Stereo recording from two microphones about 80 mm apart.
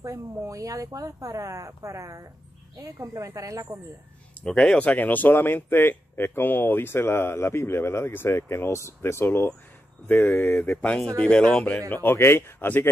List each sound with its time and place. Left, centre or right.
0.0 s speech: right
4.5 s speech: centre
11.9 s speech: left